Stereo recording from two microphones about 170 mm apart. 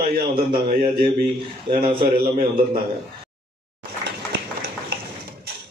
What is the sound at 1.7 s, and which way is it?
Speech, 30° right (ahead or behind).